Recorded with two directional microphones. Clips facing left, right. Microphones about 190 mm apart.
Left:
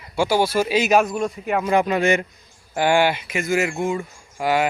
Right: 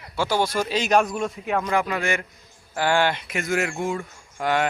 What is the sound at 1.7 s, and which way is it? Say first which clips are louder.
A man's voice: left 9 dB; 20° left (ahead or behind).